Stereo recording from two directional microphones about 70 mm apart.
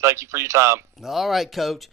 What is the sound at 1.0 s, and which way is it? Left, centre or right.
Speech, centre.